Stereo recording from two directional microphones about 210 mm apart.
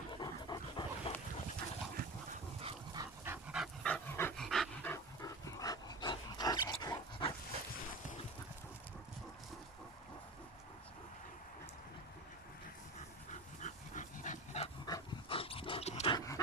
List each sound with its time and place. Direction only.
0.1 s dog: 20° left (ahead or behind)
2.6 s dog: 20° right (ahead or behind)
3.5 s dog: centre (ahead or behind)
4.9 s dog: 15° left (ahead or behind)
13.3 s dog: 35° left (ahead or behind); by 16.3 s 20° left (ahead or behind)